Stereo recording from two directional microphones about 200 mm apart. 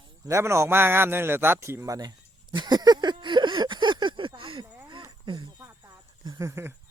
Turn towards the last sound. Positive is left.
turn(degrees=-15)  # may be behind; listen again after turning